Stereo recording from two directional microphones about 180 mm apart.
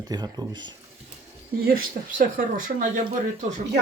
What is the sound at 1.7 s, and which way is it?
Speech, 50° right (ahead or behind).